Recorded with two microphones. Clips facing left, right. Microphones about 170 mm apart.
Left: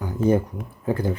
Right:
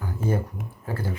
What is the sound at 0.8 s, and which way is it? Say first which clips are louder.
Speech: left 8 dB; 15° left (ahead or behind).